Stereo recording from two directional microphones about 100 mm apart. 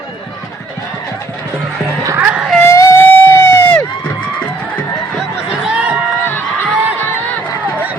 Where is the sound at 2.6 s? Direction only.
30° left (ahead or behind).